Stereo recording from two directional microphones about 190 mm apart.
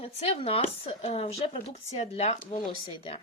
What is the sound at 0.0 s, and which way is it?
Speech, 30° left (ahead or behind).